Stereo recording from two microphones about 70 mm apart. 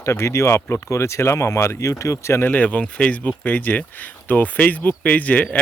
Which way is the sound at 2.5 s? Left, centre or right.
Left.